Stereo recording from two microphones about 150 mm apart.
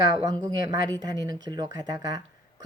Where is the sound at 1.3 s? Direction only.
30° right (ahead or behind).